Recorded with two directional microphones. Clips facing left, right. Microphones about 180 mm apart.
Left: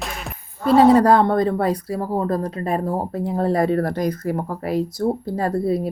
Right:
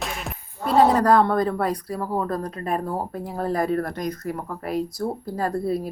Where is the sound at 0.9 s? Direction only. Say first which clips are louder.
Left 3 dB; 25° left (ahead or behind).